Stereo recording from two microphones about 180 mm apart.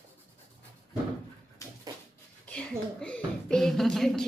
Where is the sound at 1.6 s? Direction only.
15° left (ahead or behind).